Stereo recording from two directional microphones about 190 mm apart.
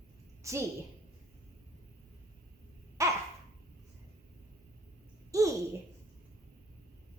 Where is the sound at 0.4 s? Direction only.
15° right (ahead or behind).